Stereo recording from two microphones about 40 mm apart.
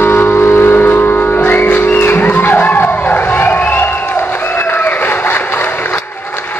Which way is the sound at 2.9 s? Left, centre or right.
Left.